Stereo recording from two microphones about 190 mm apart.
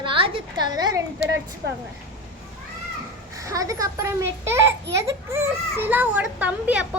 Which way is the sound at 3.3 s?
15° right (ahead or behind).